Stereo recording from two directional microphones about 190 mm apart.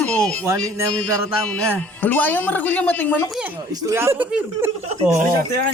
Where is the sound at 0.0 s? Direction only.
5° left (ahead or behind).